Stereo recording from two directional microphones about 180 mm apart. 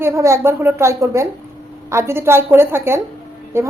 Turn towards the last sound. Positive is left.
turn(degrees=-15)  # may be behind; listen again after turning